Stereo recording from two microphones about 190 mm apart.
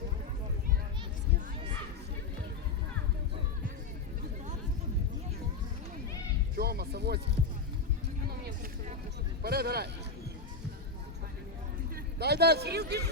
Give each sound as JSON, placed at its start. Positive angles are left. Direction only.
{"t": 6.6, "sound": "music", "side_deg": -55}
{"t": 9.4, "sound": "speech", "side_deg": -55}
{"t": 12.2, "sound": "speech", "side_deg": -60}